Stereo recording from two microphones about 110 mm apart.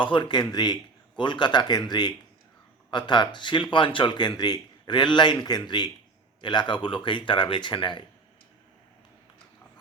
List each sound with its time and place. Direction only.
0.0 s speech: 45° left (ahead or behind)